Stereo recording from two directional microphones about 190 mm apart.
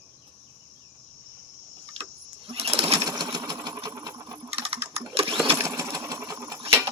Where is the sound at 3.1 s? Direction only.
20° right (ahead or behind).